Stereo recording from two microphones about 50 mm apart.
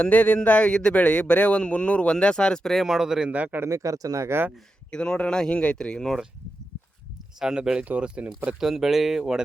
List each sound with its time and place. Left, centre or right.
0.0 s a man's voice: left
2.8 s speech: centre
3.2 s speech: right
3.6 s speech: right
4.9 s speech: centre
7.3 s speech: centre
8.5 s speech: centre